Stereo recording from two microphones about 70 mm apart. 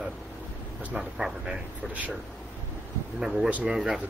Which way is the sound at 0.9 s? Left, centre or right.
Centre.